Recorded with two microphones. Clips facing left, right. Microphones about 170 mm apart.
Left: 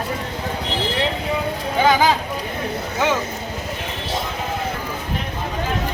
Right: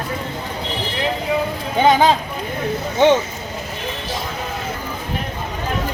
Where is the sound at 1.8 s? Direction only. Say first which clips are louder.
Right 3 dB; 25° right (ahead or behind).